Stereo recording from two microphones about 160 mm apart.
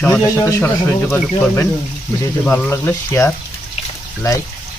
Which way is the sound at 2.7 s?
15° left (ahead or behind).